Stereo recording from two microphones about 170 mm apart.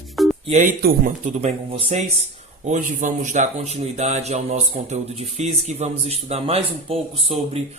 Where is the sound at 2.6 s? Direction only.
50° right (ahead or behind).